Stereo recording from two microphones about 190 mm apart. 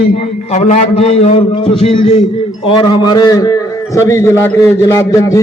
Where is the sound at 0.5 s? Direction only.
35° left (ahead or behind).